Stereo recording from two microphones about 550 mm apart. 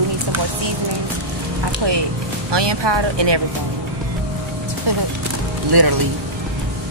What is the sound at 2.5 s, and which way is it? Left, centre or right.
Speech, right.